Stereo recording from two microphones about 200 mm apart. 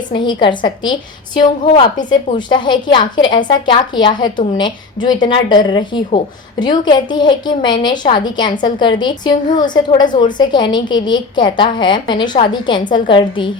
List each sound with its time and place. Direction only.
0.1 s a woman's voice: 25° left (ahead or behind)
2.0 s a woman's voice: 20° left (ahead or behind)